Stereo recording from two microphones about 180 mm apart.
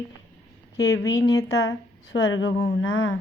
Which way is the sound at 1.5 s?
85° left.